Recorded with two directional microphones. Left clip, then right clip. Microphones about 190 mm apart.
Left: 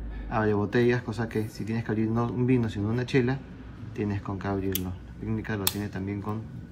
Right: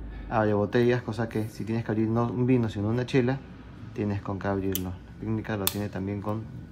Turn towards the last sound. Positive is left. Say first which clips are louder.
# right 2 dB
turn(degrees=-15)  # may be behind; listen again after turning